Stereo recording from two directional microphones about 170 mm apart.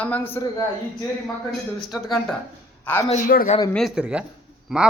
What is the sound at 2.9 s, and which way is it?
Speech, 10° left (ahead or behind).